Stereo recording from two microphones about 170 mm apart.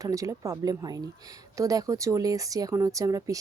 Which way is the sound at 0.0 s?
20° right (ahead or behind).